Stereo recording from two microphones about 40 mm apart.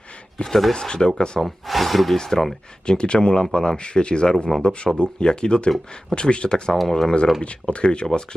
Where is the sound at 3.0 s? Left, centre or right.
Left.